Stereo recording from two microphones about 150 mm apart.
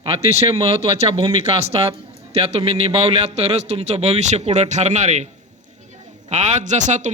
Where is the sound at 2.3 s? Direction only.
45° right (ahead or behind).